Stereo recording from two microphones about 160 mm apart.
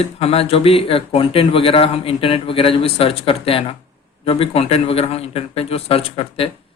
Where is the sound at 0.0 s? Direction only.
40° left (ahead or behind).